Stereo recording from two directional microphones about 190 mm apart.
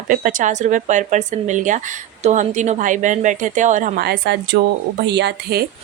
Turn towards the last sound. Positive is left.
turn(degrees=-60)  # may be behind; listen again after turning